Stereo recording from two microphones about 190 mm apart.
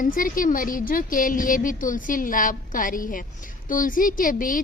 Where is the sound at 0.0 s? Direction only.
45° left (ahead or behind).